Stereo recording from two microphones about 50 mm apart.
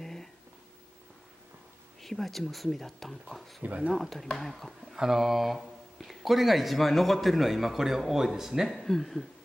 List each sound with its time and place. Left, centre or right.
0.0 s a sound: centre
2.0 s speech: centre
3.6 s speech: right
3.9 s speech: centre
4.9 s speech: centre